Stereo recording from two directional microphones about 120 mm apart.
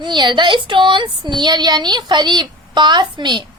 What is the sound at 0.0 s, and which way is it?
A woman's voice, 40° right (ahead or behind).